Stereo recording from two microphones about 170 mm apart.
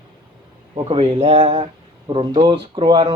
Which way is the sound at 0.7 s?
30° right (ahead or behind).